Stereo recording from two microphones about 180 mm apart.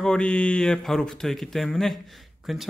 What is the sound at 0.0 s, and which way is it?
Speech, 5° left (ahead or behind).